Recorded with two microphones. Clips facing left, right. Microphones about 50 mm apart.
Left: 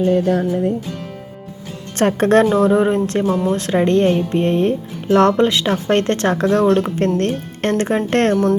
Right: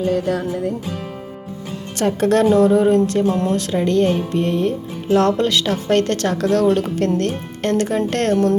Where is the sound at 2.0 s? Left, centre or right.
Left.